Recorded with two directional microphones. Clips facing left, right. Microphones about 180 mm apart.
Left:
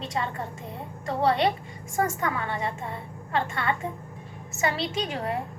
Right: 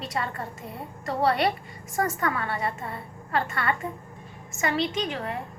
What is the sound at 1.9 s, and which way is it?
A woman's voice, 20° left (ahead or behind).